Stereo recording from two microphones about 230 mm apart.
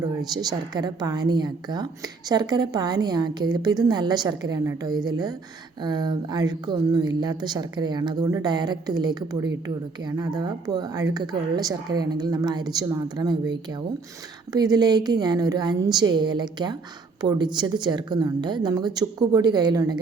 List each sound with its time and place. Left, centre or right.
0.0 s a woman's voice: centre
14.5 s a woman's voice: centre